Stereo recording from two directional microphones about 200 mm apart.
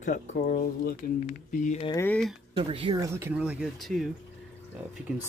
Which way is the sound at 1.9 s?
10° left (ahead or behind).